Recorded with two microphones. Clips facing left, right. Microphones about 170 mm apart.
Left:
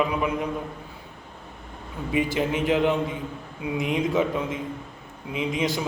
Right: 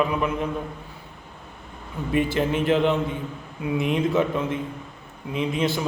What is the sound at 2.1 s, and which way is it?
A man's voice, 10° left (ahead or behind).